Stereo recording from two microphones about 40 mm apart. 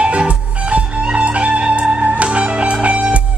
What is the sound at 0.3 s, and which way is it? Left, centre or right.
Music, right.